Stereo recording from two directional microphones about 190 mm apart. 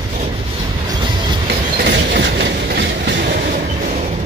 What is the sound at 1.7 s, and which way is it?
Train, 60° right (ahead or behind).